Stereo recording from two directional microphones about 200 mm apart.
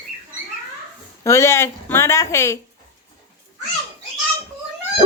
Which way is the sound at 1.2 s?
15° left (ahead or behind).